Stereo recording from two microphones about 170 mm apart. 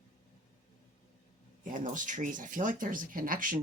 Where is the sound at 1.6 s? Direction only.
50° right (ahead or behind).